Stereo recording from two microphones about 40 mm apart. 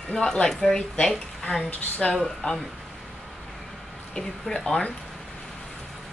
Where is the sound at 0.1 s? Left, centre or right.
Centre.